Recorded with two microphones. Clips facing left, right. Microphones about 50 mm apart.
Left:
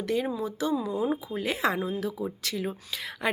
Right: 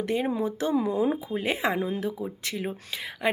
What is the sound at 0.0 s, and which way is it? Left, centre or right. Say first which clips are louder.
Speech: right 2 dB; right.